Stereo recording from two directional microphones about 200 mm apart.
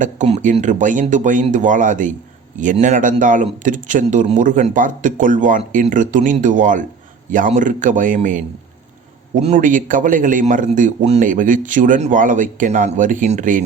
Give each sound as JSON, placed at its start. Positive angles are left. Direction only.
{"t": 0.0, "sound": "speech", "side_deg": -35}